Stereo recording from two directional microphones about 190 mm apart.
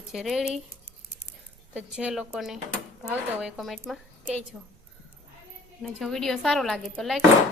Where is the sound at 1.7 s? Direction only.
5° right (ahead or behind).